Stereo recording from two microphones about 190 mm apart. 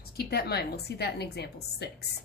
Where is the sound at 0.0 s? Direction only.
55° left (ahead or behind).